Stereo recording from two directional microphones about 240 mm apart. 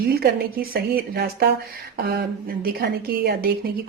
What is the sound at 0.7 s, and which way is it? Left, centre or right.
Speech, right.